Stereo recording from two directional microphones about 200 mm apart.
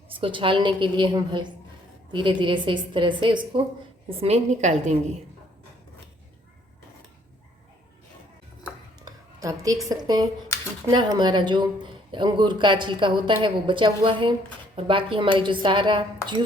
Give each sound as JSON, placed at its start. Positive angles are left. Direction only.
{"t": 0.2, "sound": "speech", "side_deg": -25}
{"t": 4.2, "sound": "a woman's voice", "side_deg": -35}
{"t": 9.0, "sound": "a sound", "side_deg": -15}
{"t": 9.9, "sound": "speech", "side_deg": -20}